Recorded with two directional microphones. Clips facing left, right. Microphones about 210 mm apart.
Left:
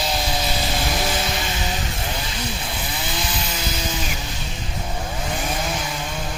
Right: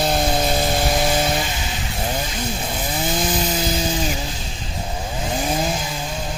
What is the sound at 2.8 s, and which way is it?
Chainsaw, 45° right (ahead or behind).